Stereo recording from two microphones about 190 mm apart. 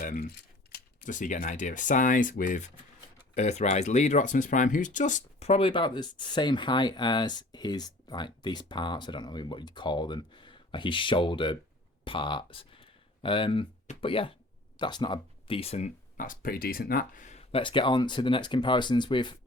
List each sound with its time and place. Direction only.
0.0 s speech: 45° left (ahead or behind); by 19.4 s 25° left (ahead or behind)